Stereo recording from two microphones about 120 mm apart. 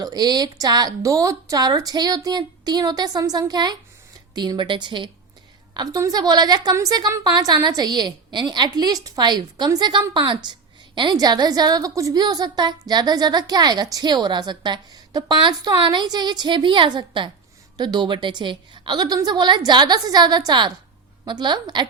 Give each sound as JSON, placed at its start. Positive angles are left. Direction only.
{"t": 0.0, "sound": "a woman's voice", "side_deg": -35}